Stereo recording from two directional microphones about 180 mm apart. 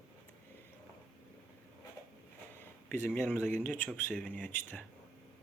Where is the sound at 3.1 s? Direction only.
5° left (ahead or behind).